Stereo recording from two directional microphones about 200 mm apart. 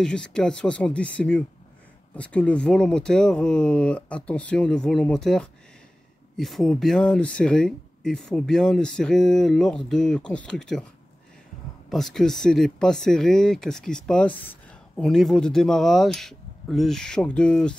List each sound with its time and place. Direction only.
0.0 s speech: 5° left (ahead or behind)
11.9 s speech: centre (ahead or behind)